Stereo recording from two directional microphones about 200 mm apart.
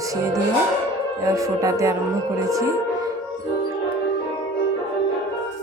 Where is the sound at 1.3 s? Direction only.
15° right (ahead or behind).